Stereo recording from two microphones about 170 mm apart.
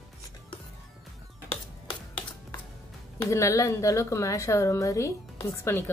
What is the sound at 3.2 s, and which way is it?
A woman's voice, 15° left (ahead or behind).